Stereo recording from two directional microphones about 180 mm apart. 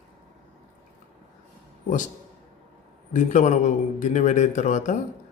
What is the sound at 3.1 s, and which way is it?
A man's voice, 40° left (ahead or behind).